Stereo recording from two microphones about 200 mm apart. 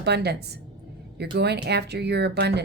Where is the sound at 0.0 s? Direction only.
55° right (ahead or behind).